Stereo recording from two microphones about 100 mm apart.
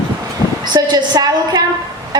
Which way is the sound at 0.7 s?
45° right (ahead or behind).